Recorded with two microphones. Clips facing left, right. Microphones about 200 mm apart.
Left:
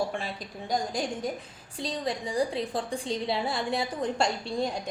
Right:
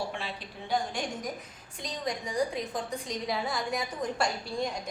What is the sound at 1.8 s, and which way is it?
A woman's voice, 30° left (ahead or behind).